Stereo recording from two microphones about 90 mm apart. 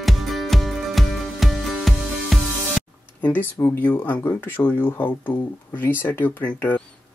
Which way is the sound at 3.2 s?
20° left (ahead or behind).